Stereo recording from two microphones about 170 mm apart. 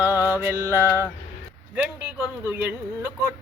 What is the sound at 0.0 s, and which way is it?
Mantra, 15° right (ahead or behind).